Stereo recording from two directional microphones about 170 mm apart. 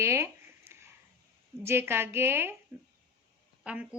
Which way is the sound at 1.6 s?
15° right (ahead or behind).